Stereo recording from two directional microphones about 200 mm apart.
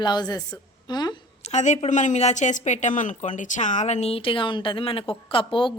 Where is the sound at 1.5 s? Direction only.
35° left (ahead or behind).